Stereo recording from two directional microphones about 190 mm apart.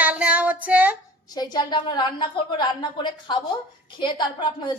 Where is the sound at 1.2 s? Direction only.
20° left (ahead or behind).